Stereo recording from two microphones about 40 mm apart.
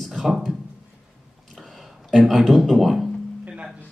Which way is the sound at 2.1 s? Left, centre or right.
Centre.